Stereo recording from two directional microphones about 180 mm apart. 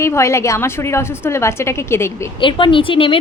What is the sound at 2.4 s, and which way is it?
Speech, 25° left (ahead or behind).